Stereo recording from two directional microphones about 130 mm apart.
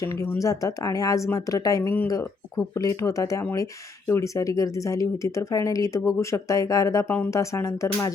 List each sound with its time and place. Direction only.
0.0 s speech: 25° left (ahead or behind)